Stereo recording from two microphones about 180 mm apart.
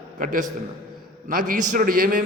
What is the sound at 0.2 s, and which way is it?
A man's voice, 50° right (ahead or behind).